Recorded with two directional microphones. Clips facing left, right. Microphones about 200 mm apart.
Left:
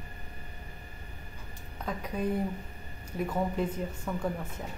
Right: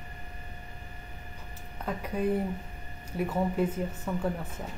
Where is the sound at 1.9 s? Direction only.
10° right (ahead or behind).